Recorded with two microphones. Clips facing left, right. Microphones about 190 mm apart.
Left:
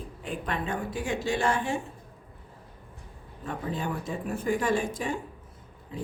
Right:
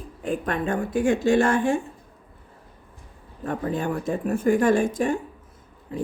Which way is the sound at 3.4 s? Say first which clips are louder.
Right 6 dB; 50° right (ahead or behind).